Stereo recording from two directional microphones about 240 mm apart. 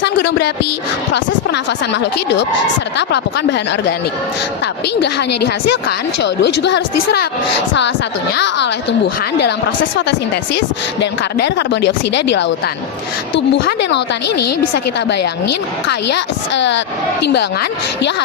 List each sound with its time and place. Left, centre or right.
0.0 s speech: left
1.9 s speech: left
5.3 s a woman's voice: left
6.2 s speech: left
8.4 s speech: left
11.0 s speech: left
14.3 s a woman's voice: left
16.1 s speech: left